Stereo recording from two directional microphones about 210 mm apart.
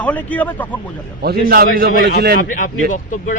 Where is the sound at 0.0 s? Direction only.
5° left (ahead or behind).